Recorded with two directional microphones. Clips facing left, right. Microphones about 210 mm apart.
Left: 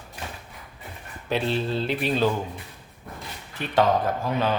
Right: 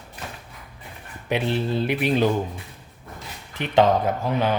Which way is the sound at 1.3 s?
15° right (ahead or behind).